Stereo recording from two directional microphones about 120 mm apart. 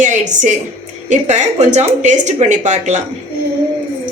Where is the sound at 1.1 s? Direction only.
75° right (ahead or behind).